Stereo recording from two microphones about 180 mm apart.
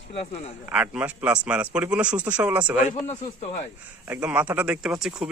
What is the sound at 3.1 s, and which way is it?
Speech, 35° left (ahead or behind).